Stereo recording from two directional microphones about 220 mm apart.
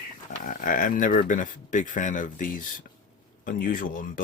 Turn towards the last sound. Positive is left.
turn(degrees=40)  # may be behind; listen again after turning